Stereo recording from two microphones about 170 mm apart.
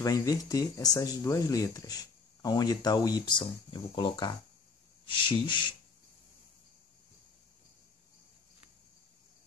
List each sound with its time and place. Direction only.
0.0 s speech: 20° left (ahead or behind)